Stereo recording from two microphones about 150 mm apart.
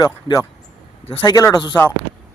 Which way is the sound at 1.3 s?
25° left (ahead or behind).